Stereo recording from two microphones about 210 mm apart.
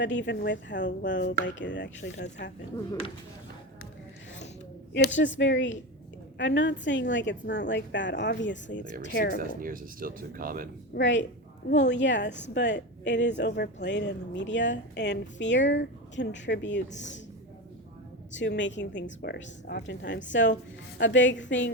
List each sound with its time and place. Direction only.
0.0 s speech: 60° left (ahead or behind)
4.9 s speech: 55° left (ahead or behind)
9.0 s speech: 45° left (ahead or behind)
9.6 s speech: 40° right (ahead or behind)
10.9 s speech: 60° left (ahead or behind)
18.3 s speech: 60° left (ahead or behind)